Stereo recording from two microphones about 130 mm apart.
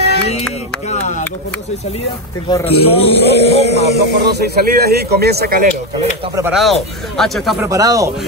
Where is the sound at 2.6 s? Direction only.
50° left (ahead or behind).